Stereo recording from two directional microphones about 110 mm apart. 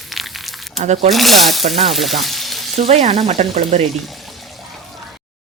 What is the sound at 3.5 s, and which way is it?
Speech, 90° right.